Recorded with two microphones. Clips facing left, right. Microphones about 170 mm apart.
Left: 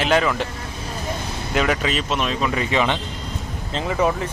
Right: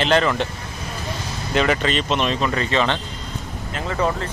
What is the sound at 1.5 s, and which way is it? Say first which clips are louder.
Speech: right 2 dB; 5° left (ahead or behind).